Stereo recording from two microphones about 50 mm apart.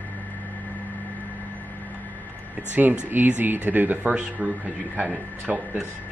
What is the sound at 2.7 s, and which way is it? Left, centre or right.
Speech, right.